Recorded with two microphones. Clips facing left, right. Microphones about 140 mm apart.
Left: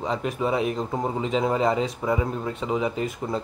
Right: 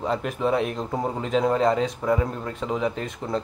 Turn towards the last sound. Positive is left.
turn(degrees=5)  # may be behind; listen again after turning